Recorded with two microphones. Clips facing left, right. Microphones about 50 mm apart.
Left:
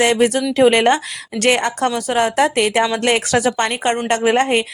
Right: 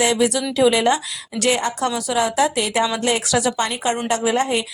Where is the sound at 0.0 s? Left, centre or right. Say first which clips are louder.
Left 4 dB; left.